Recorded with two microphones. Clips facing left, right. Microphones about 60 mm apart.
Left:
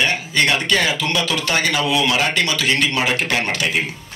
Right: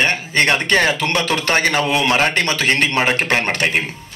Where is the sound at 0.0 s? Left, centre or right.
Right.